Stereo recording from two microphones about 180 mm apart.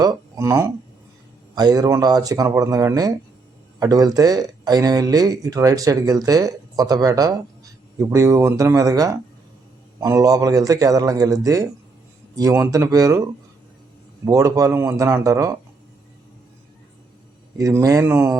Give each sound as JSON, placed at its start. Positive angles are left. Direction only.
{"t": 0.0, "sound": "a sound", "side_deg": -20}
{"t": 1.5, "sound": "speech", "side_deg": -20}
{"t": 14.3, "sound": "speech", "side_deg": -20}
{"t": 17.6, "sound": "speech", "side_deg": -15}